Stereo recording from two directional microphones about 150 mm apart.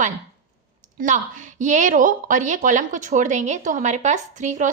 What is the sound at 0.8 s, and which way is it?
Speech, 60° right (ahead or behind).